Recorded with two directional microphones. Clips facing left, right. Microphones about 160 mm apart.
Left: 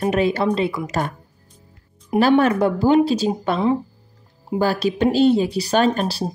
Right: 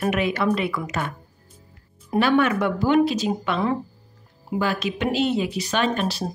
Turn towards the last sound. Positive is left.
turn(degrees=35)  # may be behind; listen again after turning